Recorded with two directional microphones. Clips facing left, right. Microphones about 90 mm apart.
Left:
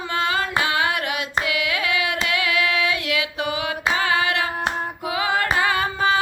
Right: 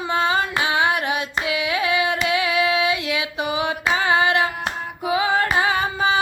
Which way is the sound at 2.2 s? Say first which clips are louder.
Right 2 dB; 25° right (ahead or behind).